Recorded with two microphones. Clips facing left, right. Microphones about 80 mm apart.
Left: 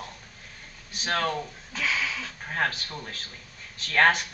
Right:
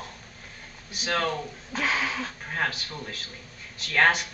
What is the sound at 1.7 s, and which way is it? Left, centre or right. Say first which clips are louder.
Speech: right 2 dB; right.